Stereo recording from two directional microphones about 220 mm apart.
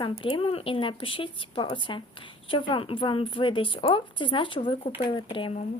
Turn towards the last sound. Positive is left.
turn(degrees=20)  # may be behind; listen again after turning